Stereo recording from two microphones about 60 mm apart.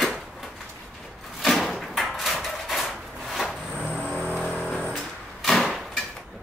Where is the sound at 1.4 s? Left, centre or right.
Centre.